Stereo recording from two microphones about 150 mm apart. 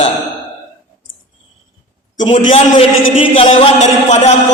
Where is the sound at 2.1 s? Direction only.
55° left (ahead or behind).